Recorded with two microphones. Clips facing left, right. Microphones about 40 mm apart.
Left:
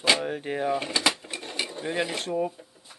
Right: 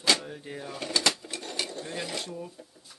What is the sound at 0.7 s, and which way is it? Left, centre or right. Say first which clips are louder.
Speech: left 3 dB; left.